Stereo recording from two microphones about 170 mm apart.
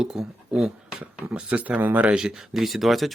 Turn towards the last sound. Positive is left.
turn(degrees=0)  # may be behind; listen again after turning